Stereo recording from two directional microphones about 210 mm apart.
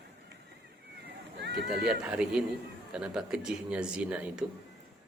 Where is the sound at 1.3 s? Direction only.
55° right (ahead or behind).